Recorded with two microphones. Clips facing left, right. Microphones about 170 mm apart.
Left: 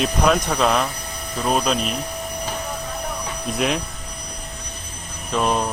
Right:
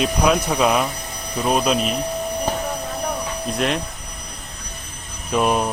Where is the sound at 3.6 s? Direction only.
Centre (ahead or behind).